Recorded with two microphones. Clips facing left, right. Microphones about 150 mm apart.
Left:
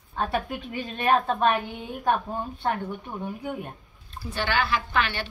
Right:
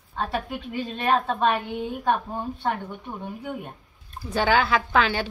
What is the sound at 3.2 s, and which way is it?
Speech, 10° left (ahead or behind).